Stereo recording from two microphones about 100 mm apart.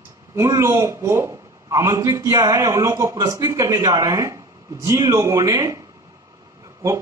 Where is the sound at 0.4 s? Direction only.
30° right (ahead or behind).